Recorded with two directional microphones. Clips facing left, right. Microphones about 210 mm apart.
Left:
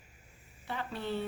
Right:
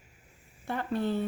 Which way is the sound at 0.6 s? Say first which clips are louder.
Right 7 dB; 50° right (ahead or behind).